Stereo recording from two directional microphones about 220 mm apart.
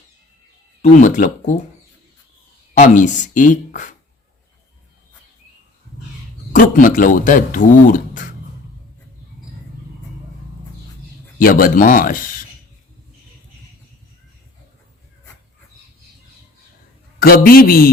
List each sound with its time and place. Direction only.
0.8 s speech: 35° left (ahead or behind)
2.7 s speech: 35° left (ahead or behind)
6.5 s speech: 35° left (ahead or behind)
11.3 s speech: 40° left (ahead or behind)
17.2 s a man's voice: 40° left (ahead or behind)